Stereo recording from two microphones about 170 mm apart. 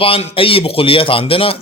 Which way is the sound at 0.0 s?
35° left (ahead or behind).